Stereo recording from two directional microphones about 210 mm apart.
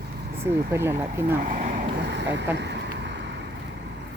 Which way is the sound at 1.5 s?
35° right (ahead or behind).